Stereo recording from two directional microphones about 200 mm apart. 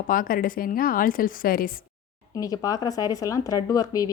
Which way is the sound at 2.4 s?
15° left (ahead or behind).